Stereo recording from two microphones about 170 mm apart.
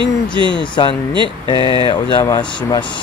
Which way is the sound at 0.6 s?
25° left (ahead or behind).